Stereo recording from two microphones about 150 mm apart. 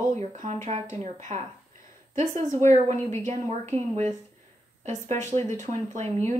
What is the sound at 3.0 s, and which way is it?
Speech, 15° left (ahead or behind).